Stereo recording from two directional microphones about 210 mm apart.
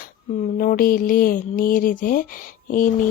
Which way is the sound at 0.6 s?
40° left (ahead or behind).